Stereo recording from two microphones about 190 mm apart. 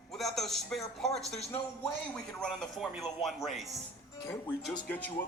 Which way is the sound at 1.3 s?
35° left (ahead or behind).